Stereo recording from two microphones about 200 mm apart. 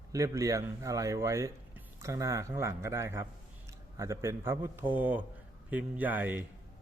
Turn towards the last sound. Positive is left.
turn(degrees=-10)  # may be behind; listen again after turning